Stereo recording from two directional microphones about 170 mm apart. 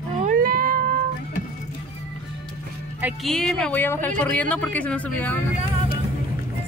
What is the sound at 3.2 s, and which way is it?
Speech, 5° left (ahead or behind).